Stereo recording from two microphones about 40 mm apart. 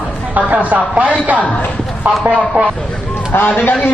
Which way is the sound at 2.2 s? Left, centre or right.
Right.